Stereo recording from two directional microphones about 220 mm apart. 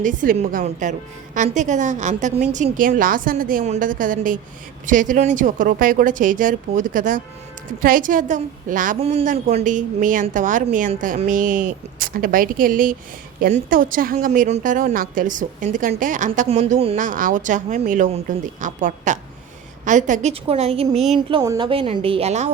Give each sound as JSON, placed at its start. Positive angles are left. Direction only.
{"t": 0.0, "sound": "a woman's voice", "side_deg": -35}